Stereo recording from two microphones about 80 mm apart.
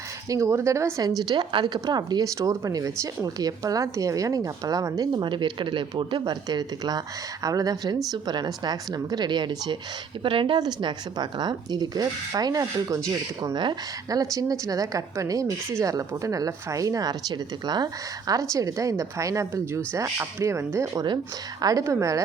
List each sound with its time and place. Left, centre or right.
0.3 s speech: right
1.3 s speech: right
5.1 s speech: right
7.4 s speech: right
8.1 s speech: right
10.2 s a woman's voice: right
10.6 s speech: right
13.4 s speech: right
14.1 s speech: right
18.3 s speech: right
21.6 s speech: right
21.8 s speech: right